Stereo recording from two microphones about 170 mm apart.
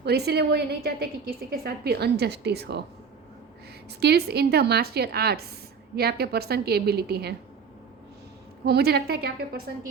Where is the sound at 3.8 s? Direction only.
75° right (ahead or behind).